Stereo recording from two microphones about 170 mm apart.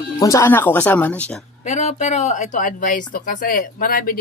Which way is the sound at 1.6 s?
40° left (ahead or behind).